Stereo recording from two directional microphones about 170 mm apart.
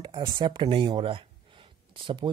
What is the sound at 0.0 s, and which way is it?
Speech, 25° right (ahead or behind).